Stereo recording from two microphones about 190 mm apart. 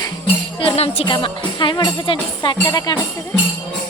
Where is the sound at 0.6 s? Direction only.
30° left (ahead or behind).